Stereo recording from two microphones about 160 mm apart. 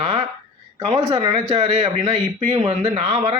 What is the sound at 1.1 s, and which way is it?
Speech, 30° right (ahead or behind).